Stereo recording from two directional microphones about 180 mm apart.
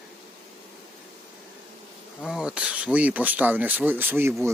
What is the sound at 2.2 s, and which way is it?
Speech, 5° right (ahead or behind).